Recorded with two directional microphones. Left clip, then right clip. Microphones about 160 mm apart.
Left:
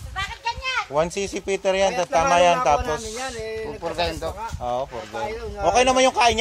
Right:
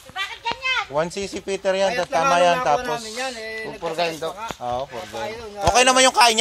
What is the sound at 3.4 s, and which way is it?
Speech, 20° left (ahead or behind).